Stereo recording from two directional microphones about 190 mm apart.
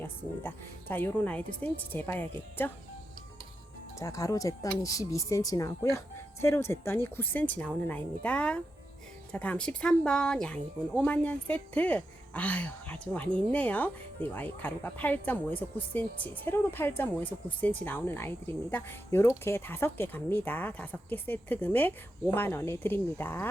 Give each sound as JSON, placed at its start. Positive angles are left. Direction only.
{"t": 0.0, "sound": "speech", "side_deg": 10}
{"t": 3.9, "sound": "speech", "side_deg": 15}